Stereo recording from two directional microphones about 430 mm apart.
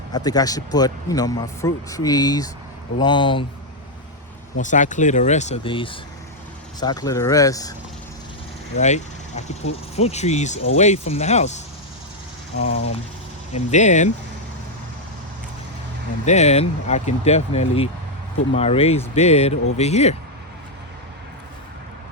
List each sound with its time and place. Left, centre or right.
0.1 s speech: centre
4.5 s speech: centre
8.7 s speech: centre
12.6 s speech: centre
16.2 s speech: centre